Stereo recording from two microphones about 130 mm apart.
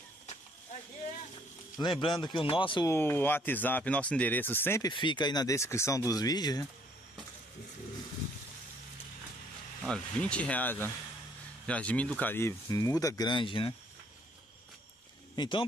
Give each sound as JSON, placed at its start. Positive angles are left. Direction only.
{"t": 2.0, "sound": "speech", "side_deg": 35}
{"t": 2.9, "sound": "speech", "side_deg": 15}
{"t": 4.8, "sound": "speech", "side_deg": 40}
{"t": 9.8, "sound": "speech", "side_deg": 5}
{"t": 15.3, "sound": "speech", "side_deg": 35}